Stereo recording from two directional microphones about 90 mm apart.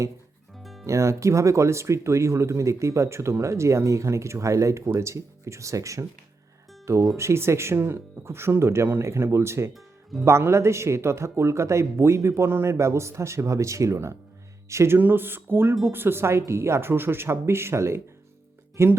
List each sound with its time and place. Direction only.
0.6 s music: centre (ahead or behind)
0.9 s speech: 35° right (ahead or behind)
9.7 s music: centre (ahead or behind)
10.2 s speech: 30° right (ahead or behind)